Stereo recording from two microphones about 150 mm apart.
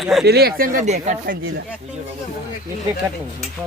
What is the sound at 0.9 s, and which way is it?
Speech, 50° right (ahead or behind).